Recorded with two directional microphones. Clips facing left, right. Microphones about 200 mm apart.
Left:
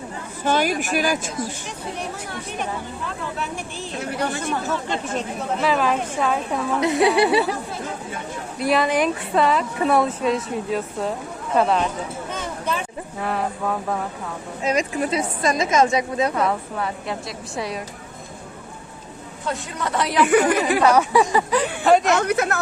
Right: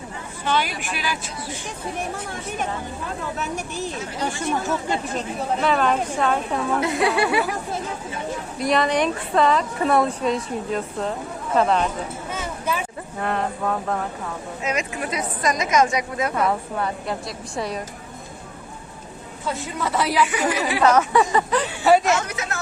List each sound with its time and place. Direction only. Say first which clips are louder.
0.4 s a woman's voice: left 4 dB; 45° left (ahead or behind)
3.3 s speech: right 2 dB; 45° right (ahead or behind)
5.5 s a woman's voice: even; 5° left (ahead or behind)
6.7 s a woman's voice: left 5 dB; 20° left (ahead or behind)
8.5 s a woman's voice: left 1 dB; 5° left (ahead or behind)
12.3 s a sound: even; 5° right (ahead or behind)
13.1 s a woman's voice: even; 5° left (ahead or behind)
14.6 s a woman's voice: left 5 dB; 35° left (ahead or behind)
16.3 s a woman's voice: even; centre (ahead or behind)
19.5 s a woman's voice: even; 5° right (ahead or behind)
20.2 s a woman's voice: left 6 dB; 55° left (ahead or behind)
20.8 s speech: right 1 dB; 10° left (ahead or behind)
21.8 s a woman's voice: even; 5° right (ahead or behind)
22.1 s speech: left 5 dB; 60° left (ahead or behind)